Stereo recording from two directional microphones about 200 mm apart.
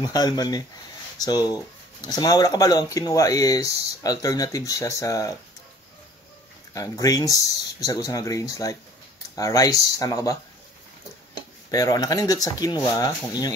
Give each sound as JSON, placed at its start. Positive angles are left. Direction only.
{"t": 0.1, "sound": "speech", "side_deg": 20}
{"t": 6.7, "sound": "speech", "side_deg": 15}
{"t": 11.7, "sound": "speech", "side_deg": 20}